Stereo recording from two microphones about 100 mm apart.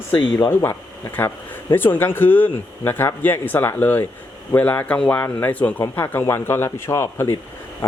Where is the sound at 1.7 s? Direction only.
20° left (ahead or behind).